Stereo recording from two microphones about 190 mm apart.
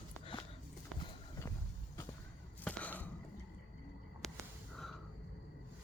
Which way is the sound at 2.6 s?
5° left (ahead or behind).